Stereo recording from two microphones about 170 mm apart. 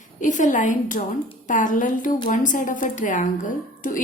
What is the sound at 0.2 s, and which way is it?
A woman's voice, 50° left (ahead or behind).